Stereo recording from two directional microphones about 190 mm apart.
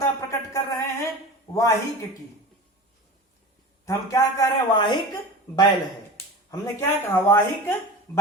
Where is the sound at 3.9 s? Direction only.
15° left (ahead or behind).